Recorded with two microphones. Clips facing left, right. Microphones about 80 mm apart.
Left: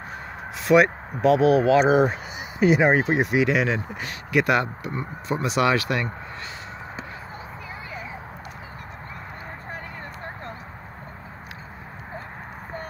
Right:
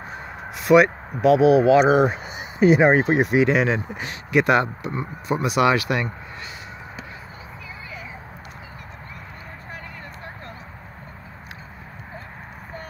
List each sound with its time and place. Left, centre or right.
0.1 s crow: centre
0.8 s speech: centre
1.4 s speech: centre
2.2 s speech: right
3.9 s speech: right